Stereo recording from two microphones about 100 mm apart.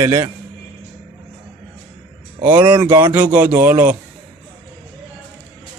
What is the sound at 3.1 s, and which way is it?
Speech, 20° right (ahead or behind).